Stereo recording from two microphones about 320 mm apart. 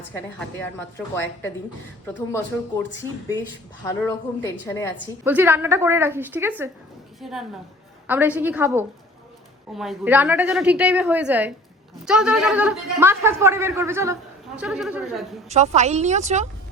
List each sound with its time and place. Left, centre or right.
0.3 s speech: centre
5.2 s a woman's voice: centre
15.4 s a woman's voice: right